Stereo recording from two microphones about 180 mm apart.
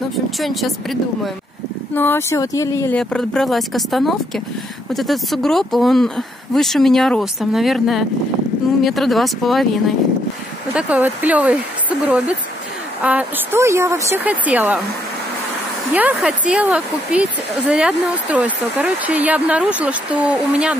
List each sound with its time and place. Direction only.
0.4 s speech: centre (ahead or behind)
2.0 s speech: 10° left (ahead or behind)
3.0 s speech: 5° left (ahead or behind)
10.7 s speech: 5° right (ahead or behind)
13.0 s speech: 10° right (ahead or behind)
15.9 s speech: 10° right (ahead or behind)